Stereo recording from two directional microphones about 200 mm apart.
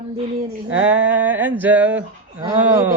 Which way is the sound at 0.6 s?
75° right (ahead or behind).